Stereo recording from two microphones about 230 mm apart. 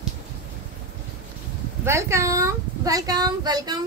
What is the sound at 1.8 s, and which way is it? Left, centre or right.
A woman's voice, centre.